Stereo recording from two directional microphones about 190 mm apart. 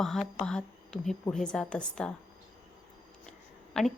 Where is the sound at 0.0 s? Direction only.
Centre (ahead or behind).